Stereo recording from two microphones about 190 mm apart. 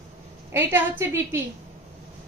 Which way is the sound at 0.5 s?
10° right (ahead or behind).